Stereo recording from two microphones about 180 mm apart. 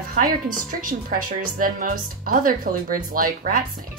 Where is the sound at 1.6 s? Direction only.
50° right (ahead or behind).